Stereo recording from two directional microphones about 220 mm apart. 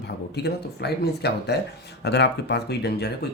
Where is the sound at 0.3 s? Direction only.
50° left (ahead or behind).